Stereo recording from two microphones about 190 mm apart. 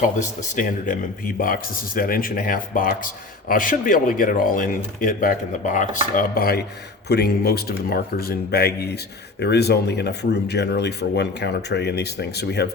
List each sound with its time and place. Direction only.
0.0 s speech: 45° left (ahead or behind)
6.1 s speech: 50° left (ahead or behind)